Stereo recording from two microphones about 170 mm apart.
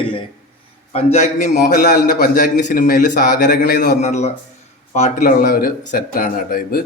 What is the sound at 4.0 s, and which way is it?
Speech, 40° left (ahead or behind).